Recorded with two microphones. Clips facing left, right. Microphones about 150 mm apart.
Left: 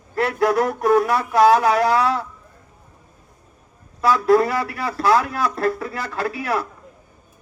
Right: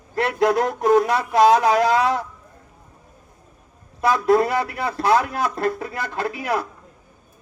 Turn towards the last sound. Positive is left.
turn(degrees=-20)  # may be behind; listen again after turning